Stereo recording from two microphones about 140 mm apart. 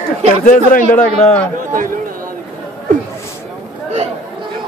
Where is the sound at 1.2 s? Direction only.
10° left (ahead or behind).